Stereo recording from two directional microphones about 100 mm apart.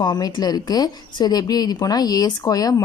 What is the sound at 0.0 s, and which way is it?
A woman's voice, 45° left (ahead or behind).